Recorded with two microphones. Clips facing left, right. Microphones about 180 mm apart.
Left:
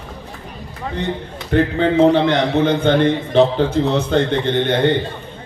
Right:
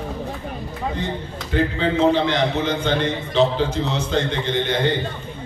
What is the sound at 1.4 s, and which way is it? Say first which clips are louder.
A man's voice: left 5 dB; 55° left (ahead or behind).